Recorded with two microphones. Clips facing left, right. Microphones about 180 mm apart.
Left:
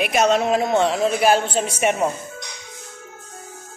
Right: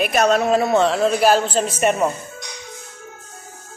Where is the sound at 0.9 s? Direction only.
5° left (ahead or behind).